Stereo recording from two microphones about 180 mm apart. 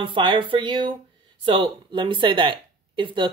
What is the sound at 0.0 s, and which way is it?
Speech, 25° right (ahead or behind).